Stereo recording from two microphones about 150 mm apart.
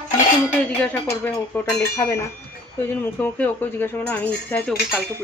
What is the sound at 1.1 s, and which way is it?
Speech, 15° left (ahead or behind).